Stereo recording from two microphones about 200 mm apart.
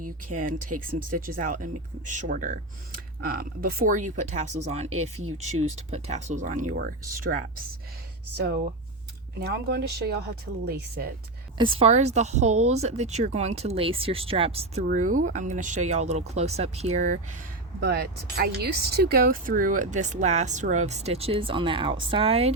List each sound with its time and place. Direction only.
0.0 s speech: 40° right (ahead or behind)
9.4 s speech: 50° right (ahead or behind)
11.5 s speech: 25° right (ahead or behind)
14.8 s speech: 40° right (ahead or behind)
17.7 s speech: 55° right (ahead or behind); by 22.5 s 30° right (ahead or behind)